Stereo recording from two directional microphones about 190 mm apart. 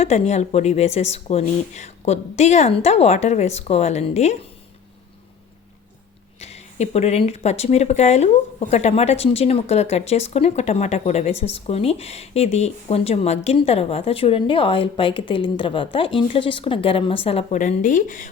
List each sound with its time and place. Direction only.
0.0 s speech: 35° left (ahead or behind)
6.4 s a woman's voice: 35° left (ahead or behind)